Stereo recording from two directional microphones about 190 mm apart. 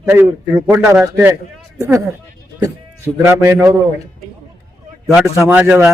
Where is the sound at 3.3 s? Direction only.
10° right (ahead or behind).